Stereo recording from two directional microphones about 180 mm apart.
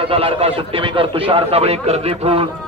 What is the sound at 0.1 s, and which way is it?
Speech, 30° right (ahead or behind).